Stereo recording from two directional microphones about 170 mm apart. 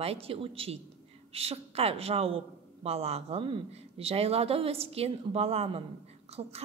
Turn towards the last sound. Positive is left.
turn(degrees=-35)  # may be behind; listen again after turning